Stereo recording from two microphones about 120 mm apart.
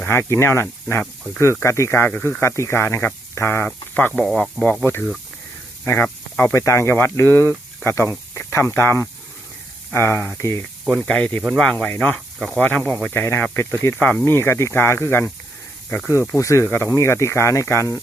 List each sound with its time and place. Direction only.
0.0 s speech: 20° left (ahead or behind)
2.4 s speech: 25° left (ahead or behind)
4.1 s speech: centre (ahead or behind)
4.6 s speech: 15° left (ahead or behind)
11.0 s speech: 10° left (ahead or behind)
16.4 s speech: 25° left (ahead or behind)